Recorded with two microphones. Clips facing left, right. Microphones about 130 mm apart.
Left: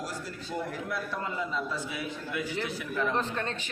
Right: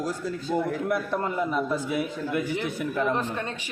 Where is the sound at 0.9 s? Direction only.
55° right (ahead or behind).